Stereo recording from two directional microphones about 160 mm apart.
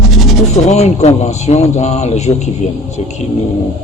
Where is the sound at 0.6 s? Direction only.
45° left (ahead or behind).